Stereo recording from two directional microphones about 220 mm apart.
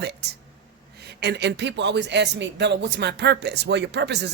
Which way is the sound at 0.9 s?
50° right (ahead or behind).